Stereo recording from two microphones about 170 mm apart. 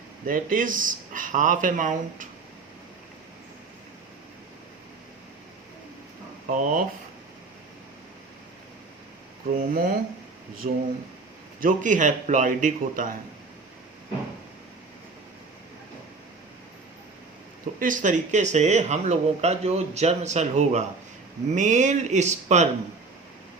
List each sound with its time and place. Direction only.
0.3 s speech: 50° right (ahead or behind)
6.5 s speech: 50° right (ahead or behind)
9.6 s speech: 55° right (ahead or behind)
17.7 s speech: 50° right (ahead or behind)